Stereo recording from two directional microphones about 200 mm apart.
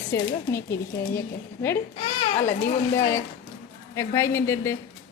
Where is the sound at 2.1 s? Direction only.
35° left (ahead or behind).